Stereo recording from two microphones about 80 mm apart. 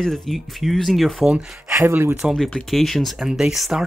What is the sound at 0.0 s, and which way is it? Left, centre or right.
Speech, centre.